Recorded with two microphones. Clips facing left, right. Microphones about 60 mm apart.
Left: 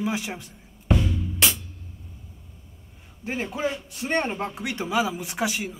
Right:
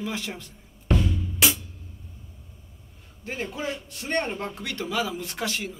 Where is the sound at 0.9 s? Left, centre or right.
Centre.